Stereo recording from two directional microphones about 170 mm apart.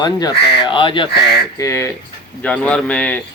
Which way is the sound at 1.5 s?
20° left (ahead or behind).